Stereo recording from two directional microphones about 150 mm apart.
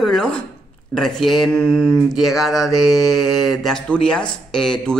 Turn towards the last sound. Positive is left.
turn(degrees=5)  # may be behind; listen again after turning